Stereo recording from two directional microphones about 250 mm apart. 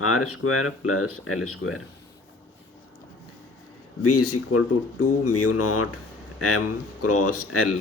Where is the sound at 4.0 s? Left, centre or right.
Left.